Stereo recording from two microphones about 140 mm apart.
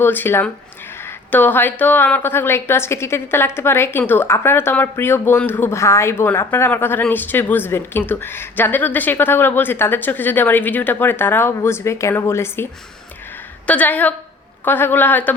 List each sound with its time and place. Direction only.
0.0 s a woman's voice: 15° left (ahead or behind)
13.7 s a woman's voice: 10° left (ahead or behind)